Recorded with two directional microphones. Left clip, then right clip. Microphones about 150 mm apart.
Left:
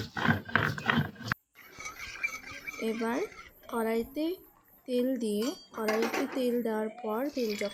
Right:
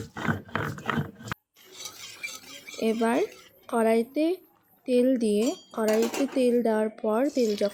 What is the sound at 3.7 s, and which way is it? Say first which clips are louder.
Speech: right 8 dB; 35° right (ahead or behind).